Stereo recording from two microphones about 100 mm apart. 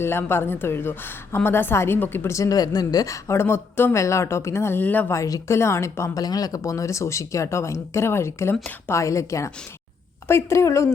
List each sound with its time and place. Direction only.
0.0 s a woman's voice: 25° left (ahead or behind)
5.1 s a woman's voice: 30° left (ahead or behind)
6.2 s a woman's voice: 40° left (ahead or behind)